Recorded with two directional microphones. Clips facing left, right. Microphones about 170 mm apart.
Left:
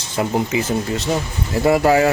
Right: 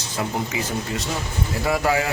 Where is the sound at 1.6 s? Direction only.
40° left (ahead or behind).